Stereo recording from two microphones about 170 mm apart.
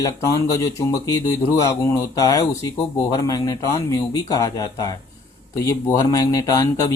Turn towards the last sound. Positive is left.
turn(degrees=20)  # may be behind; listen again after turning